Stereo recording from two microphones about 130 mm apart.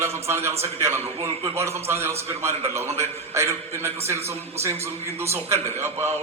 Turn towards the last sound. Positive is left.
turn(degrees=-20)  # may be behind; listen again after turning